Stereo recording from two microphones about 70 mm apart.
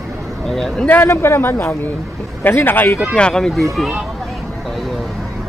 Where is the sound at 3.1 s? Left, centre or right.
Centre.